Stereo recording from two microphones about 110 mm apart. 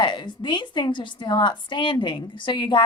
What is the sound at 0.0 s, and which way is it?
A woman's voice, 45° left (ahead or behind).